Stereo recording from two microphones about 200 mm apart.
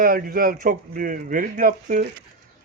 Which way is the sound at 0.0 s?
45° right (ahead or behind).